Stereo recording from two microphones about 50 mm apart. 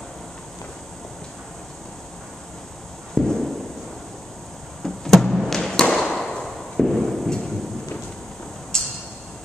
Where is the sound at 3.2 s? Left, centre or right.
Centre.